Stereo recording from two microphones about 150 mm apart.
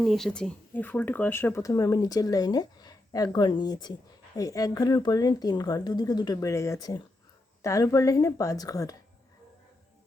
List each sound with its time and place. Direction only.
0.0 s speech: centre (ahead or behind); by 9.0 s 25° left (ahead or behind)